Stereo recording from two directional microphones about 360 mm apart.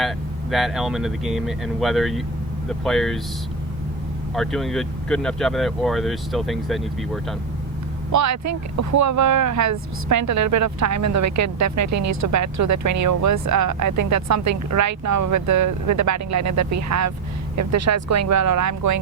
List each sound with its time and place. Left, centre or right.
0.5 s speech: centre
4.4 s speech: centre
8.1 s speech: right